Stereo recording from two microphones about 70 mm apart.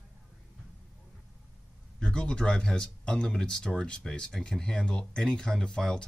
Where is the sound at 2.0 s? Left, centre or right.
Centre.